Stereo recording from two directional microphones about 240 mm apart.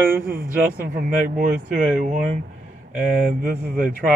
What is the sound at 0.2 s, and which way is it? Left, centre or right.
Speech, right.